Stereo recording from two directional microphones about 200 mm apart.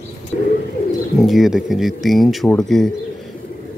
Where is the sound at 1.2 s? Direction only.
Centre (ahead or behind).